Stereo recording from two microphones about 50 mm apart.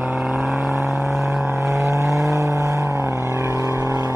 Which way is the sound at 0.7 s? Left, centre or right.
Right.